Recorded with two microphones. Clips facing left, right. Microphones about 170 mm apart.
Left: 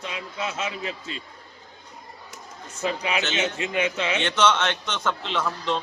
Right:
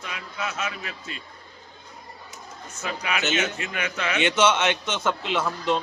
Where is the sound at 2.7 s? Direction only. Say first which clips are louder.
Left 3 dB; 30° left (ahead or behind).